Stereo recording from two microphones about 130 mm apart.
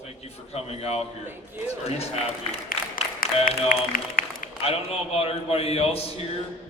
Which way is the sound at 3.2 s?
90° left.